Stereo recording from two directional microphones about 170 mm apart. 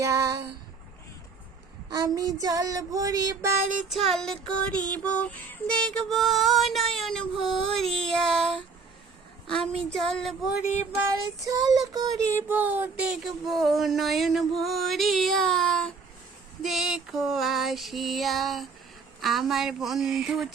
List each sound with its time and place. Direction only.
0.0 s a sound: 20° right (ahead or behind)
2.1 s female singing: 20° right (ahead or behind)
3.8 s child singing: centre (ahead or behind)
9.7 s child singing: centre (ahead or behind)
10.8 s child singing: 15° right (ahead or behind)